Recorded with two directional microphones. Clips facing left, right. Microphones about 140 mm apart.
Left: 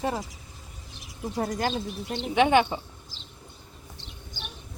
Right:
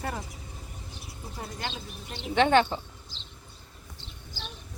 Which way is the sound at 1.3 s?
90° left.